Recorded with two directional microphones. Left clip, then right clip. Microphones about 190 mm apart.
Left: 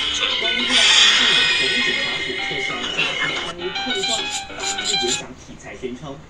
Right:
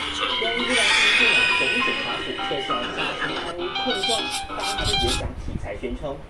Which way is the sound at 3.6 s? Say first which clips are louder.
Left 1 dB; 20° right (ahead or behind).